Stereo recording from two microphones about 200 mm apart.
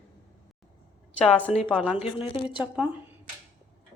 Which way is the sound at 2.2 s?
25° left (ahead or behind).